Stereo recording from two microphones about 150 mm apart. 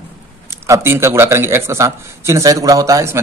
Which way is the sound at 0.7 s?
15° right (ahead or behind).